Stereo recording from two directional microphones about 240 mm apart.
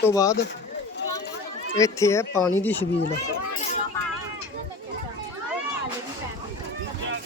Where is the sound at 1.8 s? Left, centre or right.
Centre.